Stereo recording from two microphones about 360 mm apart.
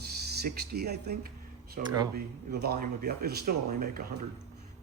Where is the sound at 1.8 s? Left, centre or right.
Right.